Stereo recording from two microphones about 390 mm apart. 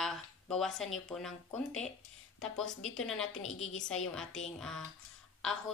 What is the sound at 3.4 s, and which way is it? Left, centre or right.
Speech, left.